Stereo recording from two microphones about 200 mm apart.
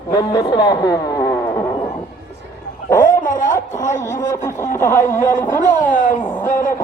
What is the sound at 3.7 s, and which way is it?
Speech, 40° left (ahead or behind).